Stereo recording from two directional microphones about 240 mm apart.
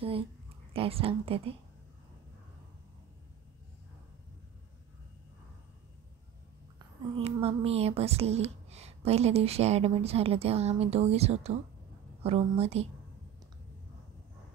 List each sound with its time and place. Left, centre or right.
0.7 s speech: right
7.2 s speech: right